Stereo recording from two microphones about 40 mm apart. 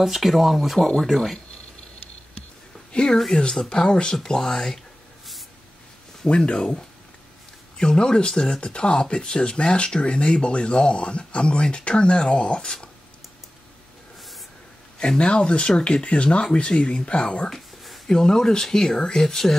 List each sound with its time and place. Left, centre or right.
0.0 s speech: centre
0.7 s speech: centre
2.9 s speech: left
6.2 s speech: left
15.0 s speech: left